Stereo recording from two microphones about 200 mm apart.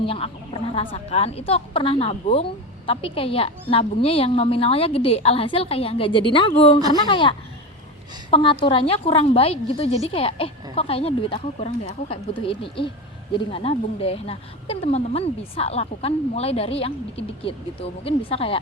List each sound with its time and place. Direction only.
0.0 s a woman's voice: 25° left (ahead or behind)